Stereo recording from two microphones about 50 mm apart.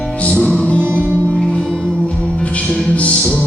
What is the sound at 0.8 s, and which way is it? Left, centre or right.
Music, right.